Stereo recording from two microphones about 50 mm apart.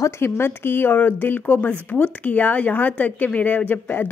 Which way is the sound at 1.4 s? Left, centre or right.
Left.